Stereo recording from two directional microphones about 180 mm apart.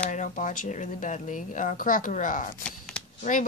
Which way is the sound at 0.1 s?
45° left (ahead or behind).